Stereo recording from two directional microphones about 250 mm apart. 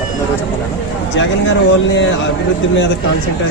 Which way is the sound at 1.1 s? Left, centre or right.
Left.